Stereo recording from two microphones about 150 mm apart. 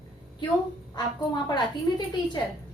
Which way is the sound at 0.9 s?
30° left (ahead or behind).